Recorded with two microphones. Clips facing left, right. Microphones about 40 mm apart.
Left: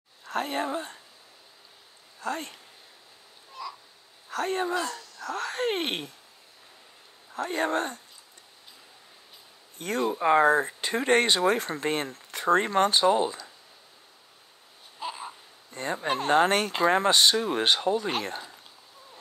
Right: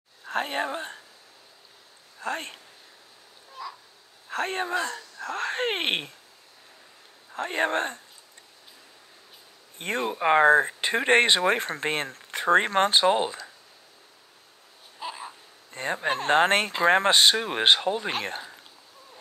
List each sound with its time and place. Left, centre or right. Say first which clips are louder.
0.3 s speech: right 1 dB; right
2.1 s speech: right 1 dB; right
3.6 s crow: even; centre
4.3 s speech: even; right
7.3 s speech: right 1 dB; right
9.8 s speech: even; right
15.0 s babbling: left 1 dB; centre
15.7 s speech: right 1 dB; right